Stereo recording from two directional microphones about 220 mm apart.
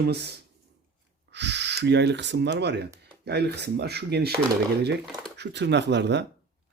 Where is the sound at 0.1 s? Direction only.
50° right (ahead or behind).